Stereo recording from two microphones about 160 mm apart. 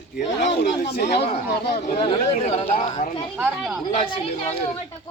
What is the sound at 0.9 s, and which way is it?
Speech, 90° left.